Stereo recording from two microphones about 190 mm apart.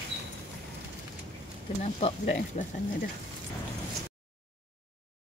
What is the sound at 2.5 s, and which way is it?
Speech, 35° left (ahead or behind).